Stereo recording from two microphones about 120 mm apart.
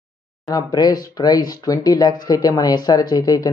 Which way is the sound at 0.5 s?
35° left (ahead or behind).